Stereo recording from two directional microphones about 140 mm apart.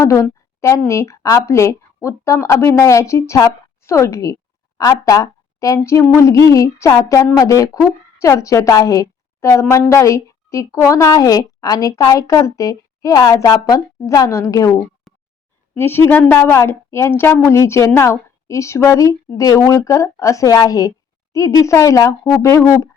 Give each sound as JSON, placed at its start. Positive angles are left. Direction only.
{"t": 0.0, "sound": "a woman's voice", "side_deg": 20}
{"t": 15.1, "sound": "a sound", "side_deg": 0}
{"t": 15.7, "sound": "speech", "side_deg": 15}